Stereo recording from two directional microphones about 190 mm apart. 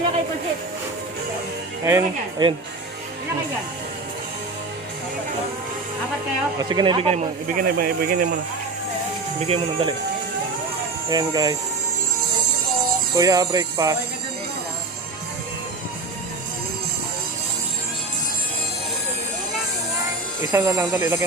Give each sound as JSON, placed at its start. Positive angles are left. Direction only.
{"t": 1.8, "sound": "speech", "side_deg": -15}
{"t": 6.6, "sound": "speech", "side_deg": -20}
{"t": 7.5, "sound": "speech", "side_deg": -50}
{"t": 9.5, "sound": "speech", "side_deg": -30}
{"t": 11.1, "sound": "speech", "side_deg": -20}
{"t": 13.1, "sound": "speech", "side_deg": -20}
{"t": 20.5, "sound": "speech", "side_deg": -15}